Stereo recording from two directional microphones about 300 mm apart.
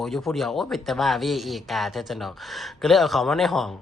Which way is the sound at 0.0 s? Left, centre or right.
Centre.